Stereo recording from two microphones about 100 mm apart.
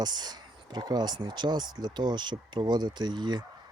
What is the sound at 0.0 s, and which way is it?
Speech, 45° right (ahead or behind).